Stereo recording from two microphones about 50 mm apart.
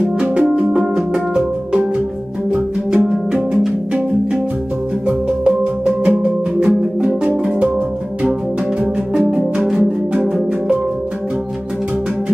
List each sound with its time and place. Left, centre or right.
0.2 s music: right
0.9 s music: centre
5.0 s music: right